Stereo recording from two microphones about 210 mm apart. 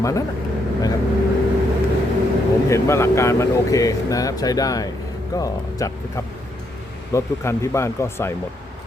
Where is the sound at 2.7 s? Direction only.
15° left (ahead or behind).